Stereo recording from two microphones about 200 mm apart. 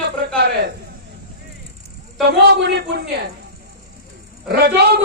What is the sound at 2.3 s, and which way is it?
A man's voice, 55° right (ahead or behind).